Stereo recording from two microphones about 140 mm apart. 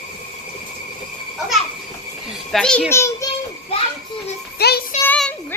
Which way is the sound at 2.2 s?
Centre (ahead or behind).